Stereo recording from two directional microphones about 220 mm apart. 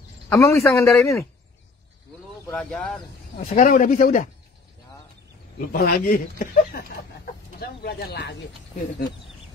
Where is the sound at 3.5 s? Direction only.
35° left (ahead or behind).